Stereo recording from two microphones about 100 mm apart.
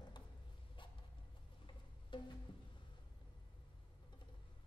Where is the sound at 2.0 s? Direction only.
50° left (ahead or behind).